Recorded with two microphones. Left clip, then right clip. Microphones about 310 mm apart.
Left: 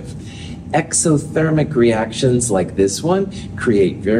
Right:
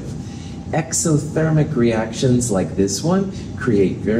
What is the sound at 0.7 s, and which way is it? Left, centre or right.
Speech, left.